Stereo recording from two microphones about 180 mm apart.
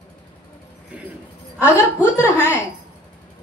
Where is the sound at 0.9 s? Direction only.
5° right (ahead or behind).